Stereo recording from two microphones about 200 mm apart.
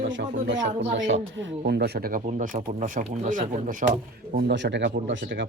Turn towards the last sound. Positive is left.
turn(degrees=-65)  # may be behind; listen again after turning